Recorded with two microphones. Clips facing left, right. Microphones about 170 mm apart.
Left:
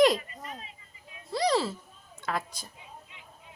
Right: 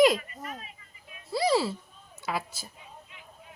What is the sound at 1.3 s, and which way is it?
Speech, 5° right (ahead or behind).